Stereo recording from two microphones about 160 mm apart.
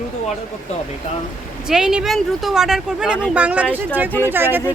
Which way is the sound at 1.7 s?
5° right (ahead or behind).